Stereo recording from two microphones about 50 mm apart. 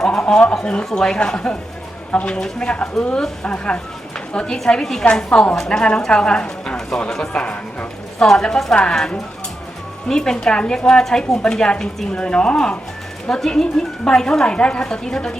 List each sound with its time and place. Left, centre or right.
0.0 s a woman's voice: centre
7.1 s a sound: centre
8.3 s a woman's voice: centre